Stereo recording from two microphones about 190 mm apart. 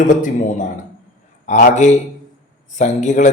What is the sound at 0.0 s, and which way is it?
Speech, 45° left (ahead or behind).